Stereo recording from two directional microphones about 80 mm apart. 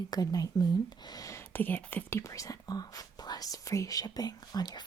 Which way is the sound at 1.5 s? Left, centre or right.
Left.